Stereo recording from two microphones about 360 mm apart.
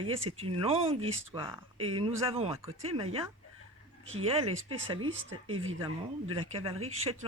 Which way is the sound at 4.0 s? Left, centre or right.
Right.